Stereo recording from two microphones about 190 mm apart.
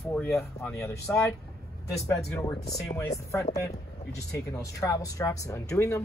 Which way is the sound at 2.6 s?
5° left (ahead or behind).